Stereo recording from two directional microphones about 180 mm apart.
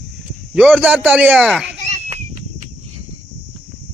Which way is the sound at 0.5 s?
5° right (ahead or behind).